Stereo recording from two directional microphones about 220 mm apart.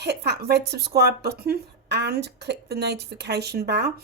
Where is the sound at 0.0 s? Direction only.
50° right (ahead or behind).